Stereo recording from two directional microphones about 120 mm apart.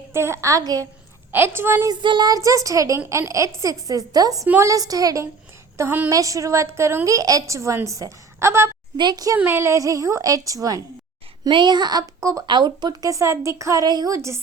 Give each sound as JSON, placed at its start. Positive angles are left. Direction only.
{"t": 0.1, "sound": "a woman's voice", "side_deg": -20}
{"t": 1.3, "sound": "a woman's voice", "side_deg": -20}
{"t": 1.9, "sound": "a woman's voice", "side_deg": -40}
{"t": 4.4, "sound": "a woman's voice", "side_deg": -15}
{"t": 4.7, "sound": "a woman's voice", "side_deg": -30}
{"t": 9.0, "sound": "a woman's voice", "side_deg": -35}
{"t": 9.4, "sound": "a woman's voice", "side_deg": -20}
{"t": 11.4, "sound": "a woman's voice", "side_deg": -40}
{"t": 12.5, "sound": "a woman's voice", "side_deg": -40}